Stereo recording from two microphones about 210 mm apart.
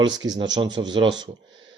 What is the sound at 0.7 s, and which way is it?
Speech, 20° right (ahead or behind).